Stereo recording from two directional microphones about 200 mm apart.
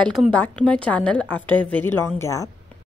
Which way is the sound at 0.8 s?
5° left (ahead or behind).